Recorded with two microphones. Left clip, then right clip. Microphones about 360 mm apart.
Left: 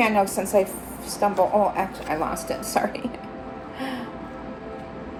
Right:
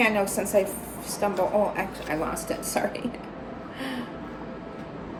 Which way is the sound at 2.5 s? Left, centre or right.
Centre.